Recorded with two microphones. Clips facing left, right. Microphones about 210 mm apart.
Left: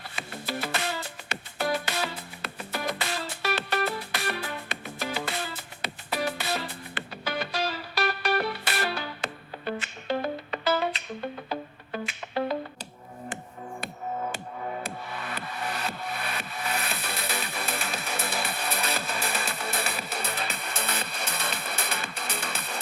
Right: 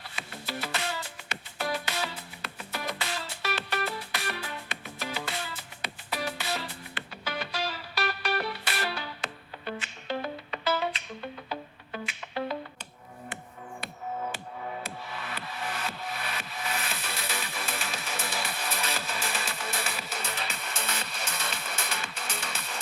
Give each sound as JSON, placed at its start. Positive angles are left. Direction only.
{"t": 0.2, "sound": "music", "side_deg": 50}
{"t": 3.8, "sound": "music", "side_deg": 60}
{"t": 15.1, "sound": "music", "side_deg": 50}
{"t": 15.8, "sound": "music", "side_deg": 60}